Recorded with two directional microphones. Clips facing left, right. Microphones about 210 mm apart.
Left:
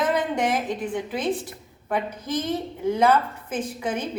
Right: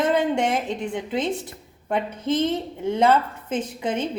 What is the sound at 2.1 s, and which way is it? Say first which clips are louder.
A woman's voice: right 4 dB; 25° right (ahead or behind).